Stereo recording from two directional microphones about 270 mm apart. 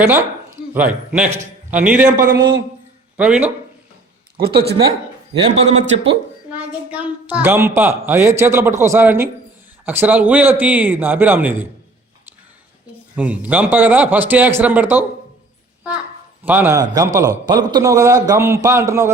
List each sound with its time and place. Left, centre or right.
0.0 s a man's voice: centre
2.1 s a man's voice: right
3.2 s a man's voice: centre
4.4 s speech: right
5.4 s a man's voice: right
6.5 s a man's voice: centre
13.1 s a man's voice: centre
16.4 s a man's voice: centre